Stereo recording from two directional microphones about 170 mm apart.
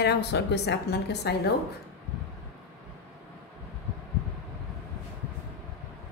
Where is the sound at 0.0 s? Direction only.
75° left (ahead or behind).